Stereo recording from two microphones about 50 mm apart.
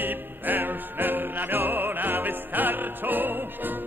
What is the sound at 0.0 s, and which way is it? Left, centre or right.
Music, right.